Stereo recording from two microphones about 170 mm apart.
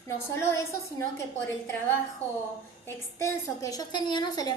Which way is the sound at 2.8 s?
20° left (ahead or behind).